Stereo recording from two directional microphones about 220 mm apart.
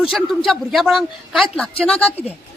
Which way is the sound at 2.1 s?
25° left (ahead or behind).